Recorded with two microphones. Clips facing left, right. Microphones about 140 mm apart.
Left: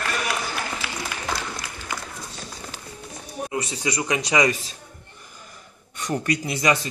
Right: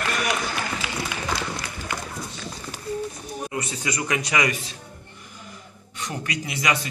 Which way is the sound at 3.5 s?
20° left (ahead or behind).